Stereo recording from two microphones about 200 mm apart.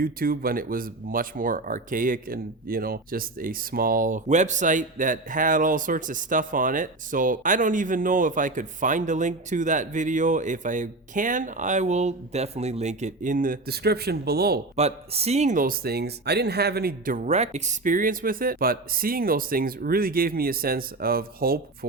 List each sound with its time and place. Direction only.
0.0 s speech: 45° right (ahead or behind)
14.8 s speech: 30° right (ahead or behind); by 21.8 s 50° right (ahead or behind)